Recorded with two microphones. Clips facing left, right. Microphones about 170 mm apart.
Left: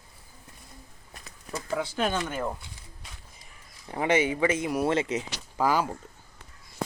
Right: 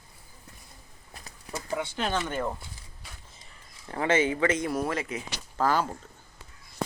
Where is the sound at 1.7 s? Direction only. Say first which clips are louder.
Left 2 dB; 10° left (ahead or behind).